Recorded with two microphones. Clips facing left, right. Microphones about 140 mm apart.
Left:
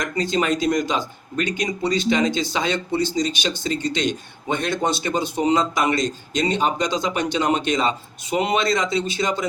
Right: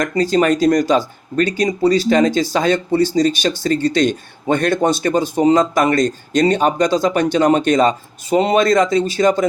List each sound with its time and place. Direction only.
0.2 s speech: 40° right (ahead or behind)